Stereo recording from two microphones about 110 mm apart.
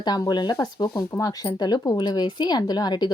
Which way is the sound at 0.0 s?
40° left (ahead or behind).